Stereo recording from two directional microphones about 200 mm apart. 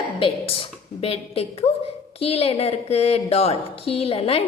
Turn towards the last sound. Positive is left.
turn(degrees=30)  # may be behind; listen again after turning